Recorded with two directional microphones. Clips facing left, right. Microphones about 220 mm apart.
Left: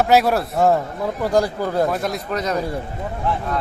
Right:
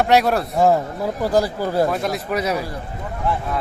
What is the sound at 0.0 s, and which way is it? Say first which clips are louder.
A man's voice: even; centre (ahead or behind).